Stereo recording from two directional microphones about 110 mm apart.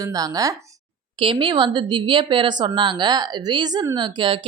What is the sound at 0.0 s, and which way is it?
Speech, 30° right (ahead or behind).